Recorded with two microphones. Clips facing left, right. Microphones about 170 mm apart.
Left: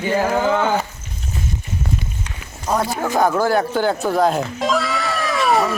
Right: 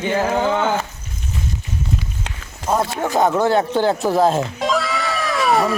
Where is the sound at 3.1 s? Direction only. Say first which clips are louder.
Right 1 dB; 20° right (ahead or behind).